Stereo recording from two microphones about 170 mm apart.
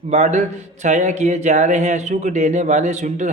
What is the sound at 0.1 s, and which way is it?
Speech, 40° right (ahead or behind).